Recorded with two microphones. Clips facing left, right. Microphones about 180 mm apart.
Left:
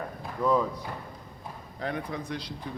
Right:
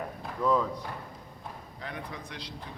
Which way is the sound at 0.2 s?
5° left (ahead or behind).